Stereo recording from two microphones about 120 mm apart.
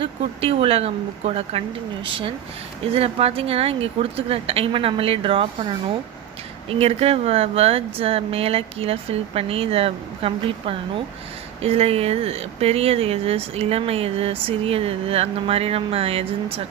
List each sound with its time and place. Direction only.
0.0 s speech: 50° right (ahead or behind)